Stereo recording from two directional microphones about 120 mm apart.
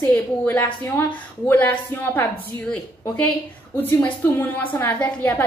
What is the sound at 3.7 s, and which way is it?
A woman's voice, 15° left (ahead or behind).